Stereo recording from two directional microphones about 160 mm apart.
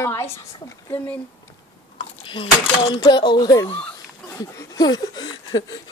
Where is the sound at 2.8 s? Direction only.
30° left (ahead or behind).